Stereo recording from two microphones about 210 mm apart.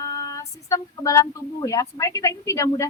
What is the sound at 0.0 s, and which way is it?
Speech, 15° left (ahead or behind).